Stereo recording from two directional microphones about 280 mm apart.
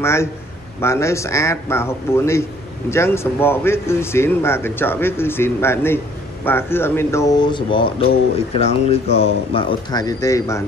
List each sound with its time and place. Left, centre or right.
0.0 s speech: centre